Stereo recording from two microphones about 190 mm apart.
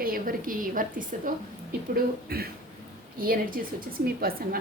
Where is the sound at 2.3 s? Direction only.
55° right (ahead or behind).